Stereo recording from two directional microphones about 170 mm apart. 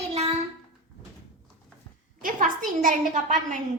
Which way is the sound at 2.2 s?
50° right (ahead or behind).